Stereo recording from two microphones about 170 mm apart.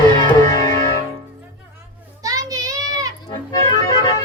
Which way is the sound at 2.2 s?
20° right (ahead or behind).